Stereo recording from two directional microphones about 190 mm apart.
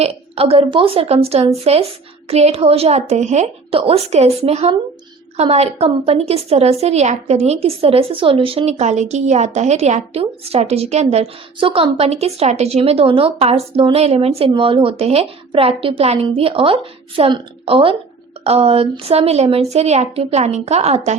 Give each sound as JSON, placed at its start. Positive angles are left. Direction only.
{"t": 0.0, "sound": "a woman's voice", "side_deg": -30}